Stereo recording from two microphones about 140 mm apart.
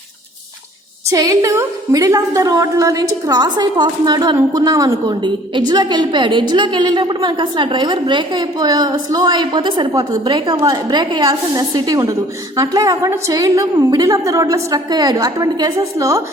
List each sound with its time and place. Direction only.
1.1 s a woman's voice: 25° right (ahead or behind)